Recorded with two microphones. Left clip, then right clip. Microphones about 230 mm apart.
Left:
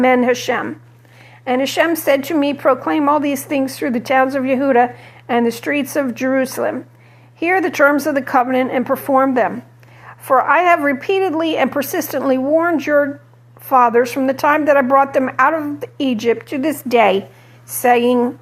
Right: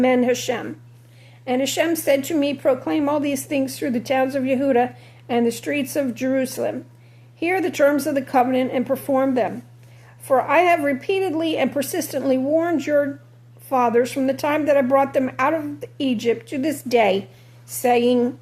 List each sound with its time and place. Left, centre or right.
0.0 s speech: centre